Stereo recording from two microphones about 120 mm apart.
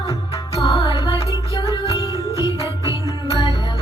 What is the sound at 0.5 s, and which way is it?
Music, 50° left (ahead or behind).